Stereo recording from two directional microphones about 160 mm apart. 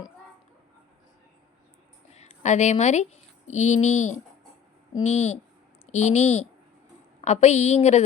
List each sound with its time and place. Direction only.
2.1 s a woman's voice: 45° left (ahead or behind)